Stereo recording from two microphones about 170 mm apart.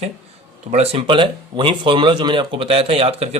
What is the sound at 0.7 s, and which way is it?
Speech, 35° right (ahead or behind).